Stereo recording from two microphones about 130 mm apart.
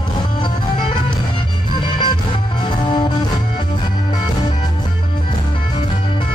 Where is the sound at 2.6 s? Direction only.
35° left (ahead or behind).